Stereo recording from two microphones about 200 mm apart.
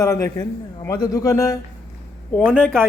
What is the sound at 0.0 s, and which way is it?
A man's voice, 15° left (ahead or behind).